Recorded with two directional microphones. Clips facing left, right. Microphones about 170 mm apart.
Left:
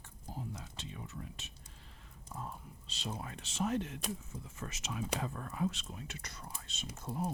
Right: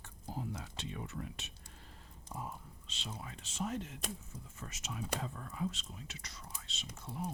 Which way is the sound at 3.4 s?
85° left.